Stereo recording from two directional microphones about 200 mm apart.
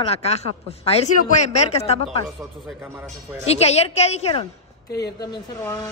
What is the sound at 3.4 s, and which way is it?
Speech, 30° left (ahead or behind).